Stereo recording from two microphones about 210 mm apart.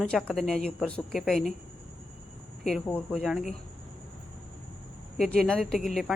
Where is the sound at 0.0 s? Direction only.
Centre (ahead or behind).